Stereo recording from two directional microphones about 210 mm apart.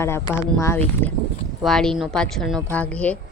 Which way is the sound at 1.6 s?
Centre (ahead or behind).